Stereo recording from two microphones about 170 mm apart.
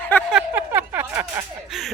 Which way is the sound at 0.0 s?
10° left (ahead or behind).